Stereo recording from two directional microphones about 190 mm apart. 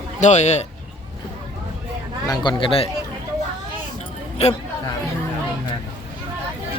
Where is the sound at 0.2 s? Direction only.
35° left (ahead or behind).